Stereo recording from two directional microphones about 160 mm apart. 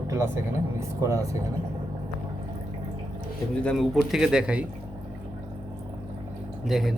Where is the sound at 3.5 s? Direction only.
5° left (ahead or behind).